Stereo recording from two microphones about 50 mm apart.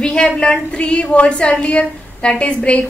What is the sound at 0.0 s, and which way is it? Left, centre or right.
A woman's voice, centre.